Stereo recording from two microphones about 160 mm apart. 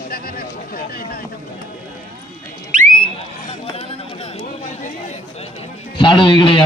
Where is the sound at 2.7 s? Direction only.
55° right (ahead or behind).